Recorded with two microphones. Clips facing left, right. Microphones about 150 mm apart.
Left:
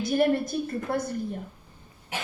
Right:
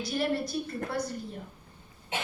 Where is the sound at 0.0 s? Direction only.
50° left (ahead or behind).